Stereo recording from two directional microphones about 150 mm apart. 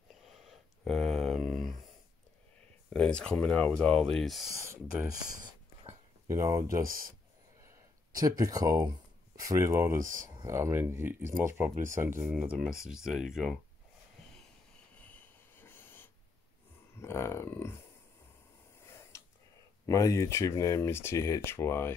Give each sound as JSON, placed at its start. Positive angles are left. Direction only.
{"t": 0.3, "sound": "a sound", "side_deg": 0}
{"t": 2.9, "sound": "speech", "side_deg": 5}
{"t": 6.2, "sound": "speech", "side_deg": -20}
{"t": 6.7, "sound": "speech", "side_deg": -70}
{"t": 8.2, "sound": "speech", "side_deg": -25}
{"t": 12.3, "sound": "speech", "side_deg": -5}
{"t": 15.0, "sound": "a sound", "side_deg": 10}
{"t": 16.9, "sound": "speech", "side_deg": 15}
{"t": 19.9, "sound": "speech", "side_deg": 20}